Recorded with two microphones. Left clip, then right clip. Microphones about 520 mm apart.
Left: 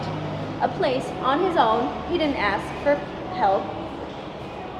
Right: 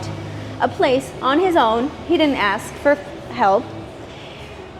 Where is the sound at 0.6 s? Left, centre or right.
Right.